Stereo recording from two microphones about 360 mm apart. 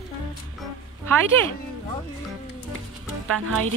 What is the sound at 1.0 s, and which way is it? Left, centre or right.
Speech, centre.